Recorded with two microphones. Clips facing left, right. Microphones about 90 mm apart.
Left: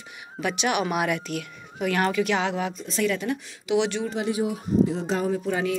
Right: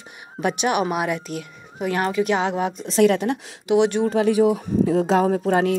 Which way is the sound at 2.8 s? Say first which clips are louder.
Right 8 dB; 60° right (ahead or behind).